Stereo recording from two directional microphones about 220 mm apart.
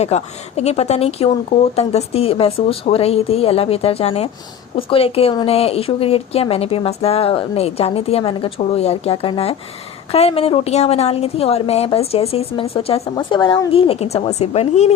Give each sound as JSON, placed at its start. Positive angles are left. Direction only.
{"t": 0.0, "sound": "a woman's voice", "side_deg": 30}